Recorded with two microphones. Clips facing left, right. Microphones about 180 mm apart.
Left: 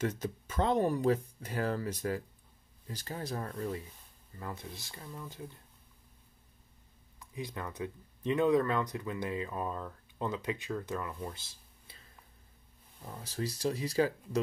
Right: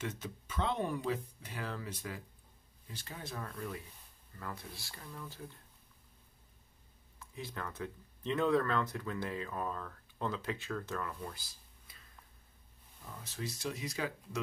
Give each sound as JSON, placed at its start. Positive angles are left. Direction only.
{"t": 0.0, "sound": "speech", "side_deg": 40}
{"t": 4.4, "sound": "speech", "side_deg": 20}
{"t": 7.2, "sound": "speech", "side_deg": 15}
{"t": 11.2, "sound": "a sound", "side_deg": 25}
{"t": 13.0, "sound": "speech", "side_deg": 35}